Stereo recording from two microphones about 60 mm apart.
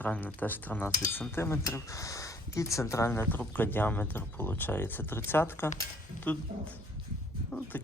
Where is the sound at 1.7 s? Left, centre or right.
Left.